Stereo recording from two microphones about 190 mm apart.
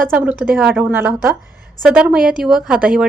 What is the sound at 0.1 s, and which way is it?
A woman's voice, 10° right (ahead or behind).